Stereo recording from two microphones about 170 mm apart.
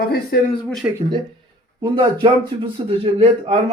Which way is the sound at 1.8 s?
25° right (ahead or behind).